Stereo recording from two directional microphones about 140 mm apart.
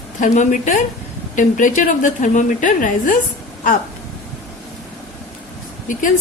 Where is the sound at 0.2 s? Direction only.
60° left (ahead or behind).